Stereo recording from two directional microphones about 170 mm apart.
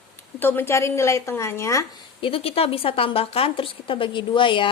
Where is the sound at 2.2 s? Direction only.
35° left (ahead or behind).